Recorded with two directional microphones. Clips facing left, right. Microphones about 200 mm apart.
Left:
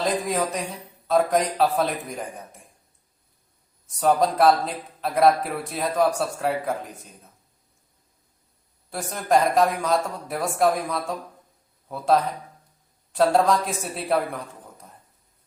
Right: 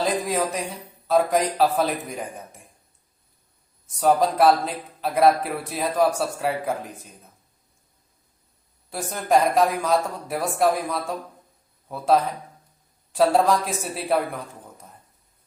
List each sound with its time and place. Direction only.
0.0 s speech: centre (ahead or behind)
3.9 s speech: centre (ahead or behind)
8.9 s speech: centre (ahead or behind)